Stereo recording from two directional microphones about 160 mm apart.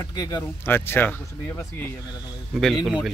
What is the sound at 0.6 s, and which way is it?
Speech, 15° left (ahead or behind).